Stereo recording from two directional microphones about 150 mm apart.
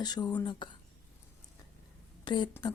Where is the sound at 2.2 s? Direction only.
30° left (ahead or behind).